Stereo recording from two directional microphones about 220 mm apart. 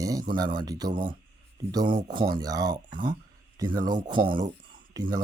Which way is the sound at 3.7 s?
40° right (ahead or behind).